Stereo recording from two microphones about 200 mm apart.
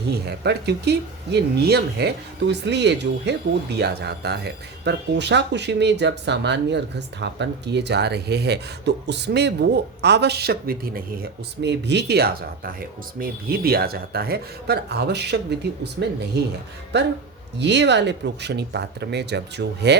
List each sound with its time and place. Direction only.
0.1 s speech: 55° right (ahead or behind)